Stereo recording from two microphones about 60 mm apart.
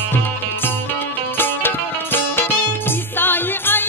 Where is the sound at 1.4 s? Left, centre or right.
Left.